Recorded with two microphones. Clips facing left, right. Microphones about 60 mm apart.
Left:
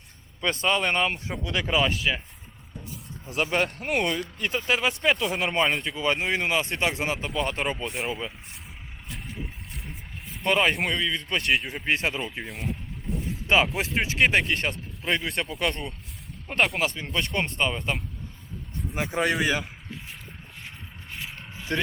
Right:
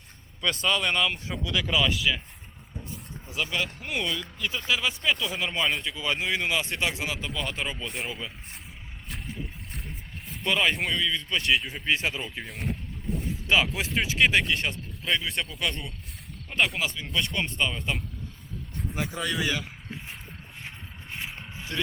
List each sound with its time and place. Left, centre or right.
0.6 s speech: left
2.8 s a sound: centre
3.3 s speech: left
7.9 s speech: centre
10.4 s speech: left
12.1 s speech: centre
13.5 s speech: left
16.5 s speech: left
19.1 s speech: left
20.7 s mechanisms: right
21.7 s speech: left